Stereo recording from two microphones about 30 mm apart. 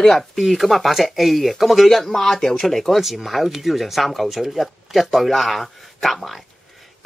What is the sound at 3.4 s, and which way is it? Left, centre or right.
Speech, centre.